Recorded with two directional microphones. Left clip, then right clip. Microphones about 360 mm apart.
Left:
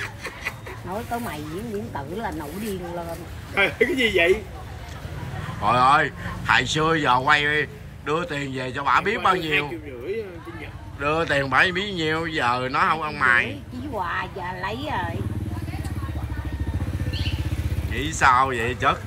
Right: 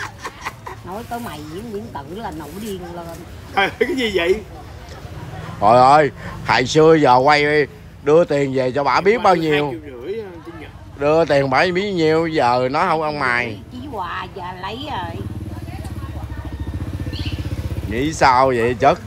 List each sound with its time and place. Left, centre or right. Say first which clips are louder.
0.0 s a sound: right 3 dB; centre
1.1 s speech: right 1 dB; centre
3.5 s speech: right 2 dB; centre
5.6 s speech: right 7 dB; centre
17.9 s speech: right 4 dB; centre